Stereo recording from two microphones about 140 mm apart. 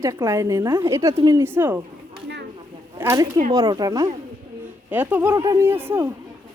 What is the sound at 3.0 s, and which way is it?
A woman's voice, 20° right (ahead or behind).